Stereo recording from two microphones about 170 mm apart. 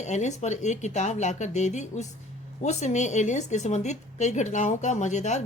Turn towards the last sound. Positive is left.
turn(degrees=45)  # may be behind; listen again after turning